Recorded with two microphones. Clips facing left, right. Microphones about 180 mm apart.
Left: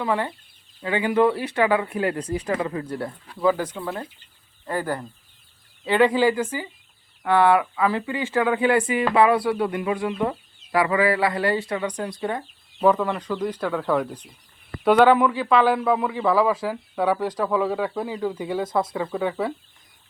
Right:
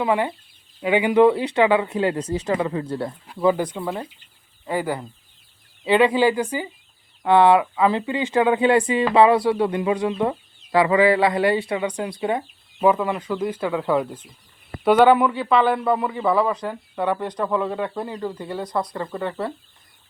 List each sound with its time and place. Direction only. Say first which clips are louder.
0.0 s speech: right 3 dB; 15° right (ahead or behind)
3.6 s speech: right 3 dB; 15° right (ahead or behind); by 19.5 s centre (ahead or behind)